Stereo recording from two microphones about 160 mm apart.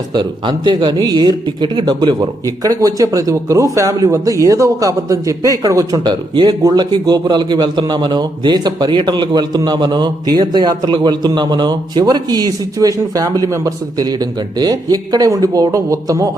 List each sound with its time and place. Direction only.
0.1 s speech: 30° right (ahead or behind)